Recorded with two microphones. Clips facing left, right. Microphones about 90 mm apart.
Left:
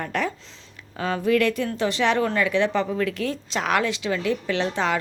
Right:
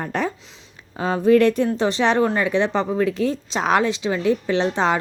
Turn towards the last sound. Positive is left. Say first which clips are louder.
# right 4 dB
turn(degrees=-25)  # may be behind; listen again after turning